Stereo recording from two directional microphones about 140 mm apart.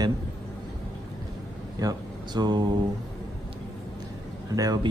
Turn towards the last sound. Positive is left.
turn(degrees=-30)  # may be behind; listen again after turning